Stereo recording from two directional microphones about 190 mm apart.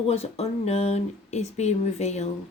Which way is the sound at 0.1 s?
35° left (ahead or behind).